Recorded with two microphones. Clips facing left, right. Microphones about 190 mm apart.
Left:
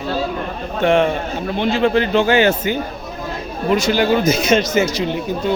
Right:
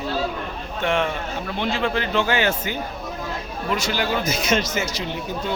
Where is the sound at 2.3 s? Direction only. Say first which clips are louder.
Left 8 dB; 70° left (ahead or behind).